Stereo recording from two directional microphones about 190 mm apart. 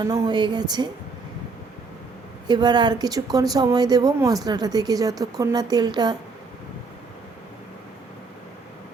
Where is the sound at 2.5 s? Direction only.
20° right (ahead or behind).